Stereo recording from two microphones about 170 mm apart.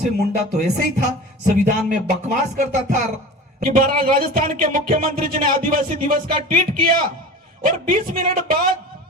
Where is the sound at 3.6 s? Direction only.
55° right (ahead or behind).